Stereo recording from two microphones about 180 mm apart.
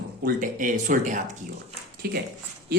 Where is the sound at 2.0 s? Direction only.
55° right (ahead or behind).